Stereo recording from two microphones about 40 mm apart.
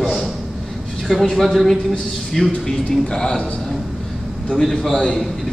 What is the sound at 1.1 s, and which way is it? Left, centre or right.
Speech, centre.